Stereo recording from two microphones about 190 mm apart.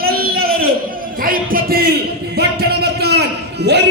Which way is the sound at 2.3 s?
55° right (ahead or behind).